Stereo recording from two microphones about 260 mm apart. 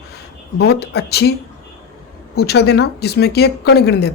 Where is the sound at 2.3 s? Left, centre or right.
Left.